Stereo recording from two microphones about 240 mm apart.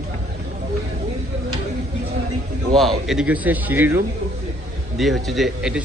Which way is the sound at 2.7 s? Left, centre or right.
Centre.